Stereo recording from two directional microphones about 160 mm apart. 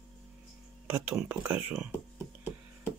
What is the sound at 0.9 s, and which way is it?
Speech, 10° right (ahead or behind).